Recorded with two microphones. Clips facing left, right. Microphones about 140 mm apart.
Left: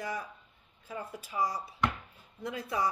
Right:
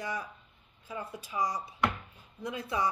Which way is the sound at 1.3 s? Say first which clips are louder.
Even; 15° right (ahead or behind).